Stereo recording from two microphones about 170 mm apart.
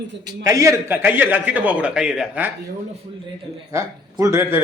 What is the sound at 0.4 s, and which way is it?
A man's voice, 20° right (ahead or behind).